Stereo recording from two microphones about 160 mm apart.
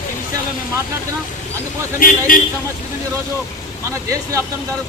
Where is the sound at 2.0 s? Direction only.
60° left (ahead or behind).